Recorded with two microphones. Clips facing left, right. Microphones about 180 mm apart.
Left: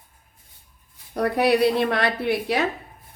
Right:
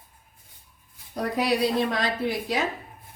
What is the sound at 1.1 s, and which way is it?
A woman's voice, 65° left (ahead or behind).